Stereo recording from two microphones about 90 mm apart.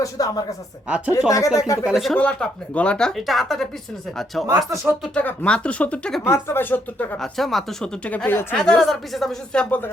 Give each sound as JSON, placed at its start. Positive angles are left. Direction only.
{"t": 0.0, "sound": "speech", "side_deg": 40}
{"t": 0.9, "sound": "speech", "side_deg": -15}
{"t": 1.3, "sound": "speech", "side_deg": 40}
{"t": 1.8, "sound": "speech", "side_deg": -5}
{"t": 2.1, "sound": "speech", "side_deg": 15}
{"t": 5.1, "sound": "speech", "side_deg": 15}
{"t": 6.2, "sound": "speech", "side_deg": 25}
{"t": 7.2, "sound": "speech", "side_deg": 5}
{"t": 8.0, "sound": "speech", "side_deg": 15}
{"t": 8.5, "sound": "speech", "side_deg": 5}